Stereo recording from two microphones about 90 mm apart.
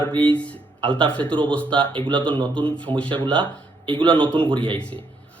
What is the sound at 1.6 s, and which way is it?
Speech, 65° right (ahead or behind).